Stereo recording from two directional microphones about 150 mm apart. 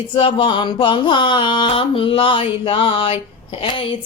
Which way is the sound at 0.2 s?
30° left (ahead or behind).